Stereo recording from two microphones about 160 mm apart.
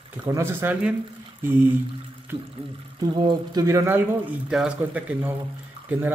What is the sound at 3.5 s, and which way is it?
Speech, 20° right (ahead or behind).